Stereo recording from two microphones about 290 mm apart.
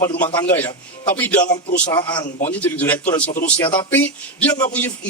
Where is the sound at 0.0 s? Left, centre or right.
Centre.